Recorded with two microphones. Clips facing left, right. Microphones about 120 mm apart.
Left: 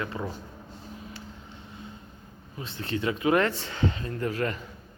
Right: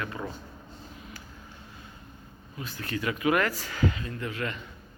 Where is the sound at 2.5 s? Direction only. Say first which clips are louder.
Left 2 dB; 25° left (ahead or behind).